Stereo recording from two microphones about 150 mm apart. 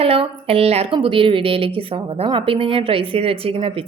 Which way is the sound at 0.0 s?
40° right (ahead or behind).